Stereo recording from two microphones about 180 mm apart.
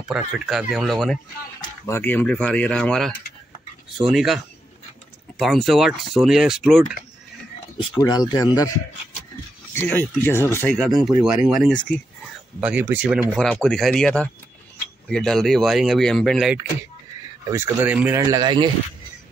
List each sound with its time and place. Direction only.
0.1 s speech: centre (ahead or behind)
1.6 s speech: 15° left (ahead or behind); by 4.4 s centre (ahead or behind)
5.4 s speech: centre (ahead or behind)
8.0 s speech: 20° left (ahead or behind)
9.8 s speech: 10° left (ahead or behind)
12.5 s speech: 10° right (ahead or behind)
13.3 s speech: 5° left (ahead or behind)
17.5 s speech: 10° right (ahead or behind)
18.2 s speech: 25° right (ahead or behind)